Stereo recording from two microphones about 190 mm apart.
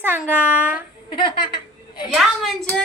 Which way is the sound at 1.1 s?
25° left (ahead or behind).